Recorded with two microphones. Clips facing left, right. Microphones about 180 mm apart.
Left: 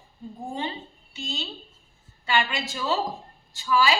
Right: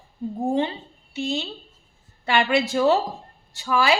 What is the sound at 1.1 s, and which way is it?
Speech, 65° right (ahead or behind).